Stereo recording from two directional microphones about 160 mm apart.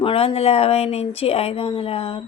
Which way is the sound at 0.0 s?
35° left (ahead or behind).